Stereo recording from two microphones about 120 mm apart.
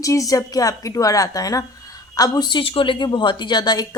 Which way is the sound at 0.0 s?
25° left (ahead or behind).